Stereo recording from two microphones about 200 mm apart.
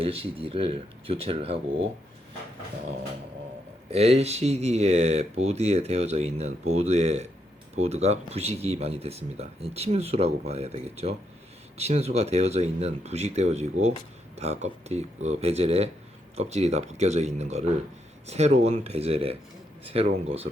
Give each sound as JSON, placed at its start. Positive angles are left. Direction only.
{"t": 0.0, "sound": "speech", "side_deg": -30}
{"t": 3.8, "sound": "speech", "side_deg": -30}